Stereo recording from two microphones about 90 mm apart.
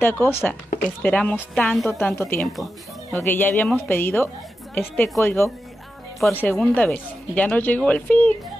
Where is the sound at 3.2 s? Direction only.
20° left (ahead or behind).